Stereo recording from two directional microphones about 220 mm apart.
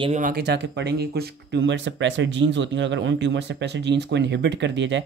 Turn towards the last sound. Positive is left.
turn(degrees=-55)  # may be behind; listen again after turning